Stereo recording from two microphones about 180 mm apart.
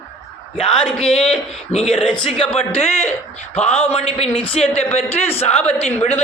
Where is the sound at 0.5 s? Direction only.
5° left (ahead or behind).